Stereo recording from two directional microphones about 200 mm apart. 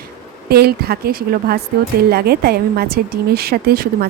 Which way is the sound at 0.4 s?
50° right (ahead or behind).